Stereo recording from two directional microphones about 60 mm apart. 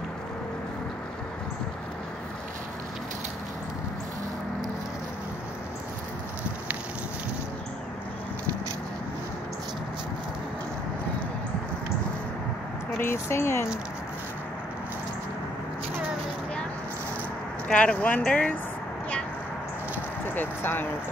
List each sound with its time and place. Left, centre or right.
13.0 s speech: left
17.6 s speech: centre
20.3 s speech: left